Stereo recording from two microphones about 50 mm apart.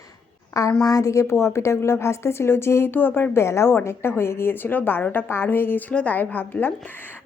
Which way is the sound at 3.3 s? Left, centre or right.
Left.